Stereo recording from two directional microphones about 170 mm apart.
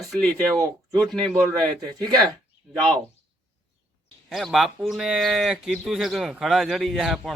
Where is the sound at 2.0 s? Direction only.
25° right (ahead or behind).